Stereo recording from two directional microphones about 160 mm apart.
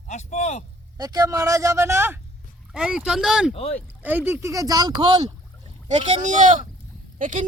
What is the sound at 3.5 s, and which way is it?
Speech, 40° left (ahead or behind).